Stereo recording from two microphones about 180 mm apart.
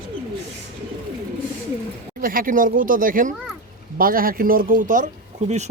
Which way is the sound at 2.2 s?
50° right (ahead or behind).